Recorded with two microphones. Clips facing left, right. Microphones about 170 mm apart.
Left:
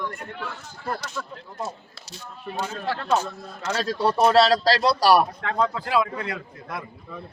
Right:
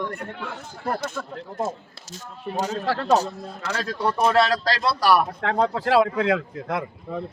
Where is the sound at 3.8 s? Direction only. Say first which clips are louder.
Left 2 dB; 30° left (ahead or behind).